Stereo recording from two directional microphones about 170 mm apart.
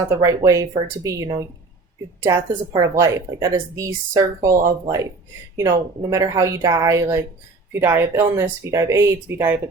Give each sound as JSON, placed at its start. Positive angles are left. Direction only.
{"t": 0.2, "sound": "a woman's voice", "side_deg": -20}
{"t": 5.5, "sound": "a woman's voice", "side_deg": -20}